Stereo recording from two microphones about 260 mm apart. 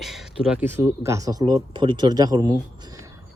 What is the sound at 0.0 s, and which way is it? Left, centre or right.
Speech, centre.